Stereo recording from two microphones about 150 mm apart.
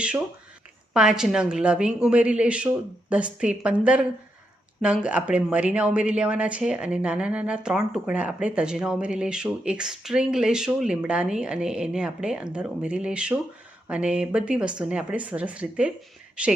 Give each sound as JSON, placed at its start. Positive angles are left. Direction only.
{"t": 0.9, "sound": "a woman's voice", "side_deg": -5}
{"t": 5.0, "sound": "a woman's voice", "side_deg": -5}